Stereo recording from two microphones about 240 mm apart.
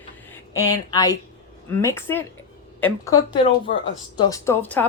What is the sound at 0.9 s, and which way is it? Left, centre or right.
Speech, centre.